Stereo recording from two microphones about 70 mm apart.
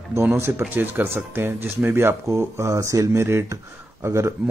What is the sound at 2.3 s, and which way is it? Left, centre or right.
Speech, right.